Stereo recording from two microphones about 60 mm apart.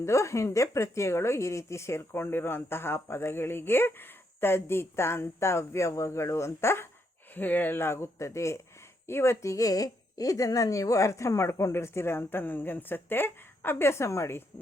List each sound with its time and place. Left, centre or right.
0.0 s a woman's voice: left
7.3 s a woman's voice: left